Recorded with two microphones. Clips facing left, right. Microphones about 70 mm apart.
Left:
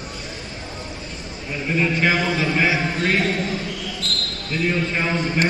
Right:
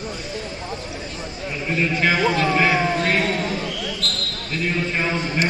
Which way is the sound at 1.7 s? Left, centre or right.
Centre.